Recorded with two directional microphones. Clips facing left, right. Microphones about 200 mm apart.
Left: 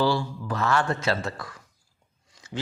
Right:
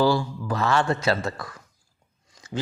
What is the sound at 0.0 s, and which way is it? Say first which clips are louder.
Speech: right 3 dB; 40° right (ahead or behind).